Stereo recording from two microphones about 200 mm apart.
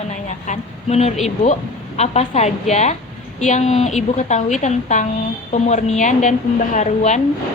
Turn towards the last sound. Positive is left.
turn(degrees=35)  # may be behind; listen again after turning